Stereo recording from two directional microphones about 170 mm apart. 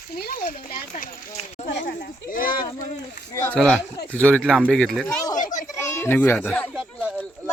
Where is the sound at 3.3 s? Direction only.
15° left (ahead or behind).